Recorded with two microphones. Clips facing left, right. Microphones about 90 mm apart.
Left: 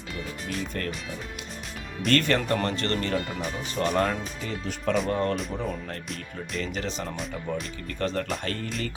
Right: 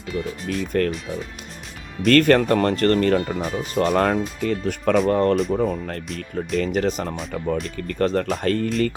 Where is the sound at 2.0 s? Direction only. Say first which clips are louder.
Right 8 dB; 50° right (ahead or behind).